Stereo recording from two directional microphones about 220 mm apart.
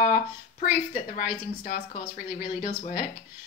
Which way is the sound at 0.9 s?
40° left (ahead or behind).